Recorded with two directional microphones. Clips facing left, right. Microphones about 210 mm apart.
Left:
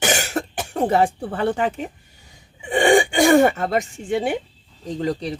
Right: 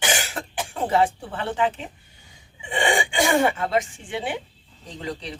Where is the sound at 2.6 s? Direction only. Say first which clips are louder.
Left 8 dB; 50° left (ahead or behind).